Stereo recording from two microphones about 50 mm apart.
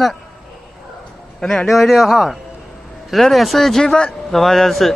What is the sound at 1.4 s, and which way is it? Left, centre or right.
Speech, centre.